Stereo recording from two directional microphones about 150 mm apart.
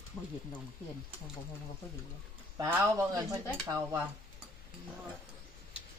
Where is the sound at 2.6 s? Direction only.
15° right (ahead or behind).